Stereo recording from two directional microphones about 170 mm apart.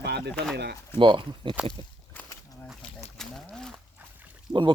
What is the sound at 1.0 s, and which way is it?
Speech, 25° right (ahead or behind).